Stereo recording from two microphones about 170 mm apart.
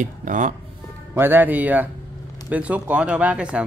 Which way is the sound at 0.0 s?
50° right (ahead or behind).